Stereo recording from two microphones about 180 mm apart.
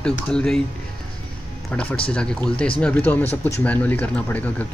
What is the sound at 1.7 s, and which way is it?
Speech, 5° left (ahead or behind).